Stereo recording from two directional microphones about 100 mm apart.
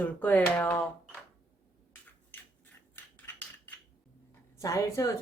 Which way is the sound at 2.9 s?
15° left (ahead or behind).